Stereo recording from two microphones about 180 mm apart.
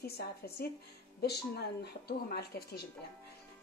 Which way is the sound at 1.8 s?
65° left (ahead or behind).